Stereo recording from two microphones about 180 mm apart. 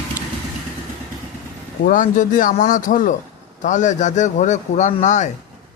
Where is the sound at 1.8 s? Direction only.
45° left (ahead or behind).